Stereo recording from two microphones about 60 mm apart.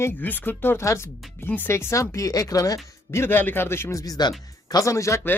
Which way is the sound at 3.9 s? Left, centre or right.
Left.